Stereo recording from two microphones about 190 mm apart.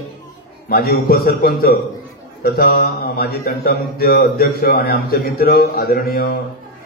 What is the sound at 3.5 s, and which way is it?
Mantra, 55° left (ahead or behind).